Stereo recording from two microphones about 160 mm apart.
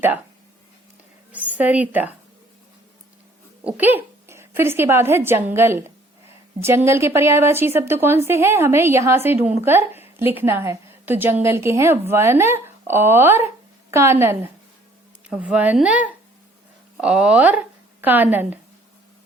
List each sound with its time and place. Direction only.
1.3 s a woman's voice: 10° right (ahead or behind)
3.7 s a woman's voice: 10° right (ahead or behind)